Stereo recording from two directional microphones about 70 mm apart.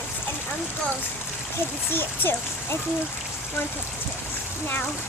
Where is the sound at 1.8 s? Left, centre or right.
Left.